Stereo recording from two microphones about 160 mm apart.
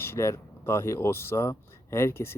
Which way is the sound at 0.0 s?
15° left (ahead or behind).